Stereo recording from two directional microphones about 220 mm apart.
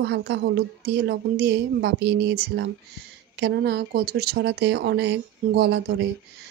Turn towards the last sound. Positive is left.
turn(degrees=-50)  # may be behind; listen again after turning